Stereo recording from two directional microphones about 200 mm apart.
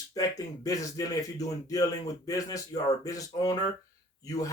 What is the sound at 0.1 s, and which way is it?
A man's voice, 15° left (ahead or behind).